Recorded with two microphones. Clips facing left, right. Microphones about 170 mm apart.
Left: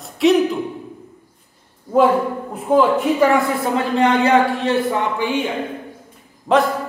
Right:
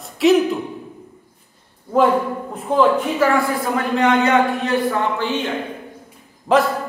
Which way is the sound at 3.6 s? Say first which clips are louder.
Left 1 dB; 30° left (ahead or behind).